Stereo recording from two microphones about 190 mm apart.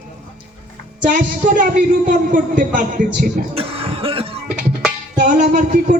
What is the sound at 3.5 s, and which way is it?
Cough, 30° right (ahead or behind).